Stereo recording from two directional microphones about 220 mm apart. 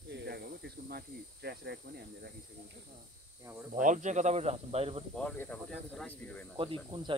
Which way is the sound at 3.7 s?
35° right (ahead or behind).